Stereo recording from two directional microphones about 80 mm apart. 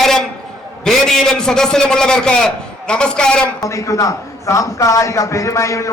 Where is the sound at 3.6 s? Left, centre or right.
Left.